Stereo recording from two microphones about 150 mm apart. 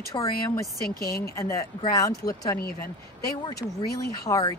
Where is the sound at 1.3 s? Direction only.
20° left (ahead or behind).